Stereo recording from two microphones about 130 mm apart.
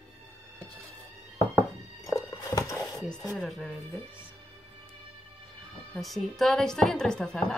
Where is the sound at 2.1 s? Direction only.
25° left (ahead or behind).